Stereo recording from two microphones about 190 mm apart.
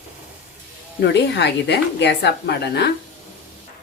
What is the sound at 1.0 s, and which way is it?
A woman's voice, 65° left (ahead or behind).